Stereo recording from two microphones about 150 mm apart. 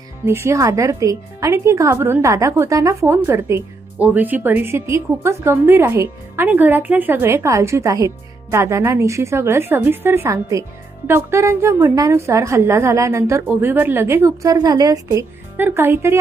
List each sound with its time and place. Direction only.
0.3 s speech: 15° right (ahead or behind)
15.5 s speech: 15° right (ahead or behind)